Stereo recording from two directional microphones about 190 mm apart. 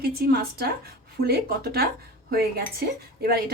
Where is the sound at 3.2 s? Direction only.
55° right (ahead or behind).